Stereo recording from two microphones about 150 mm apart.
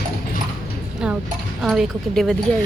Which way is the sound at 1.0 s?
5° right (ahead or behind).